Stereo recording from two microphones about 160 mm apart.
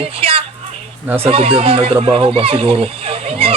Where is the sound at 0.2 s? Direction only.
35° right (ahead or behind).